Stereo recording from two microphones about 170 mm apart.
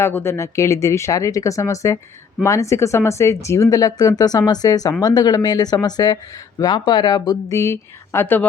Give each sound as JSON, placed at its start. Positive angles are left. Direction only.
{"t": 0.0, "sound": "speech", "side_deg": 15}